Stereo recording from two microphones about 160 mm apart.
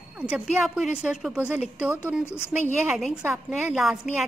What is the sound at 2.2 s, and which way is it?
Speech, 15° left (ahead or behind).